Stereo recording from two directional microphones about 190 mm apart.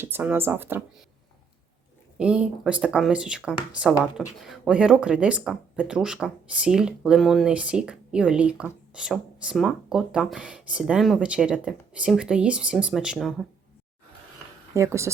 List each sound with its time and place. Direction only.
0.0 s speech: 10° right (ahead or behind)
2.1 s speech: 5° right (ahead or behind)
14.7 s speech: 15° right (ahead or behind)